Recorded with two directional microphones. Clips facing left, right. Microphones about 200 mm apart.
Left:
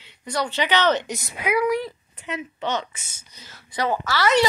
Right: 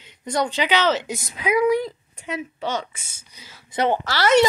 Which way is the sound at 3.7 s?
25° right (ahead or behind).